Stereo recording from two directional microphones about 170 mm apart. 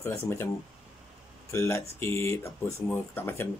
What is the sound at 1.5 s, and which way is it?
Speech, 15° left (ahead or behind).